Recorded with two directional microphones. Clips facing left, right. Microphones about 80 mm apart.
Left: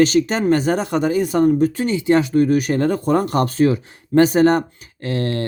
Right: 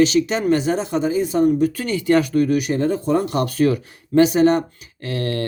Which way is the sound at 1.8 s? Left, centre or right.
Left.